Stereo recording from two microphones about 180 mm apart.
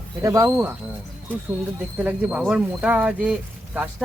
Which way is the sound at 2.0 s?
10° right (ahead or behind).